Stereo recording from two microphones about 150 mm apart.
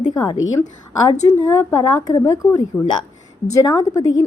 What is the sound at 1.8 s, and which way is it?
A woman's voice, 25° left (ahead or behind).